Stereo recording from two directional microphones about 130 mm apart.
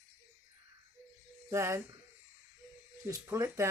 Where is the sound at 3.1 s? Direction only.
25° right (ahead or behind).